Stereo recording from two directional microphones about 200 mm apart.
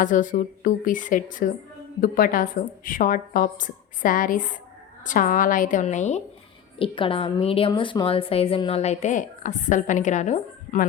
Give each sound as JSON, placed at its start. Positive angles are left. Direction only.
{"t": 0.0, "sound": "a woman's voice", "side_deg": 40}